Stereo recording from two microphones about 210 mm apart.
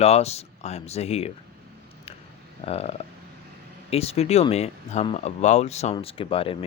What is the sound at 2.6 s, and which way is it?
Speech, 30° left (ahead or behind).